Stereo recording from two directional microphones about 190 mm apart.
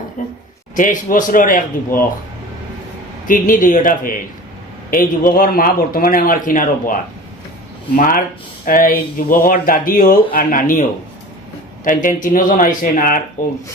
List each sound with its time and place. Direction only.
0.2 s a sound: 45° left (ahead or behind)
0.8 s speech: 45° left (ahead or behind)
3.2 s speech: 45° left (ahead or behind)
7.9 s speech: 45° left (ahead or behind)
11.9 s speech: 45° left (ahead or behind)